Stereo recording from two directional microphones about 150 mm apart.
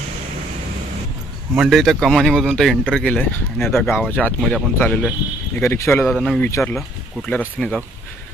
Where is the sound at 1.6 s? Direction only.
Centre (ahead or behind).